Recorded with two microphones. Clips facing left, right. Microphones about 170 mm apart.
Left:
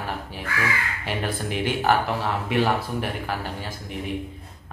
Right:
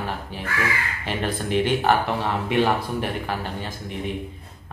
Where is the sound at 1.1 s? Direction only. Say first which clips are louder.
Right 3 dB; 10° left (ahead or behind).